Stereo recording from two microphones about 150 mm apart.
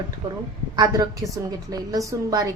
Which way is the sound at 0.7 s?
25° right (ahead or behind).